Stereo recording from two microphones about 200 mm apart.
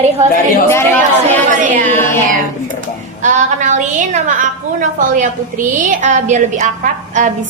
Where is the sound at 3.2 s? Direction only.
40° right (ahead or behind).